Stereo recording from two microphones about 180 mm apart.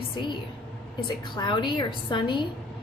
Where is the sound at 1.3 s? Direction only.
25° left (ahead or behind).